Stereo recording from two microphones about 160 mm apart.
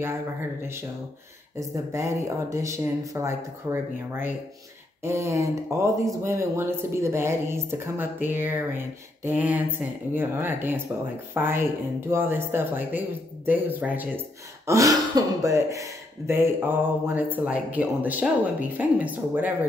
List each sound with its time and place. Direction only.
1.6 s speech: 20° right (ahead or behind)
14.7 s speech: 20° right (ahead or behind)